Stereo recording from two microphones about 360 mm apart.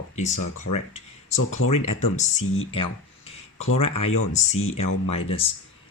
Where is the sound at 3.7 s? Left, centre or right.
Left.